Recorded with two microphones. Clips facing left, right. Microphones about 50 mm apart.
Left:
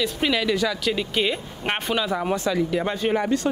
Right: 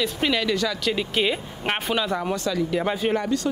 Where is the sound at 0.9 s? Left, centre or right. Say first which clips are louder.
Even; centre.